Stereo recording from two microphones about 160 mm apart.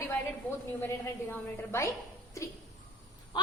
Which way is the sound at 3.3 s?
25° left (ahead or behind).